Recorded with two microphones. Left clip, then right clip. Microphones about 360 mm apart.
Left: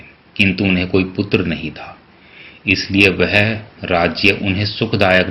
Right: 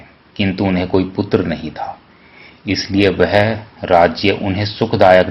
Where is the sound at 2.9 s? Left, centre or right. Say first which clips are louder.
Right 1 dB; right.